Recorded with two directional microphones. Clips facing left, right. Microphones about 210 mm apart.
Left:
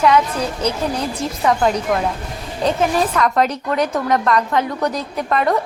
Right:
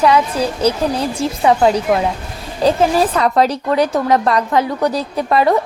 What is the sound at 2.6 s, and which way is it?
A woman's voice, 30° right (ahead or behind).